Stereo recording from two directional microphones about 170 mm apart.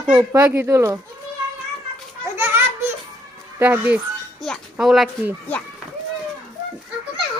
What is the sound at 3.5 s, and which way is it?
A child's voice, 10° right (ahead or behind).